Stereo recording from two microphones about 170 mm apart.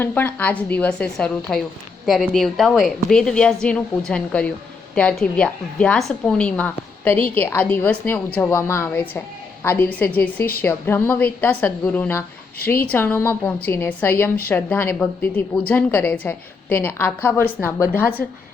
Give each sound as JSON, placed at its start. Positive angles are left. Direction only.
{"t": 0.0, "sound": "a woman's voice", "side_deg": 10}